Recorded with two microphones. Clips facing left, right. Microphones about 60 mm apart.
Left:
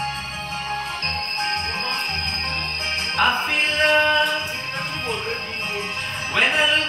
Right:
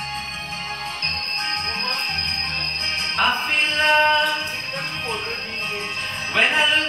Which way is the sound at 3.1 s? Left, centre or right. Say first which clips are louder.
Left 1 dB; centre.